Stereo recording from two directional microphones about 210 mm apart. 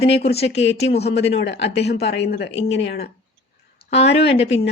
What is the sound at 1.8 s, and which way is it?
Speech, 50° left (ahead or behind).